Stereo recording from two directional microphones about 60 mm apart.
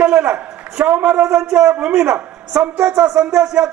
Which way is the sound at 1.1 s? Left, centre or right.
Centre.